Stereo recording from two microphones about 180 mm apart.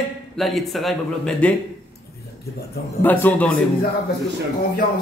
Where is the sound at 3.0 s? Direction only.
10° left (ahead or behind).